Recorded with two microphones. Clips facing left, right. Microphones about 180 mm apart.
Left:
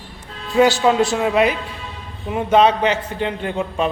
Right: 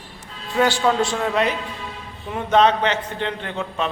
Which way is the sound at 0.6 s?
10° left (ahead or behind).